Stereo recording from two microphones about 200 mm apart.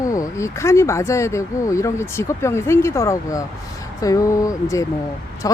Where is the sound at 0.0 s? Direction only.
15° left (ahead or behind).